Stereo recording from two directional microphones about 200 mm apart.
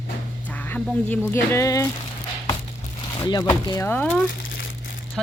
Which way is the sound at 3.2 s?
15° left (ahead or behind).